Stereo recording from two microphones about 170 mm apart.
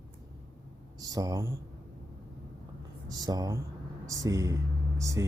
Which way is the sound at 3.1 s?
20° right (ahead or behind).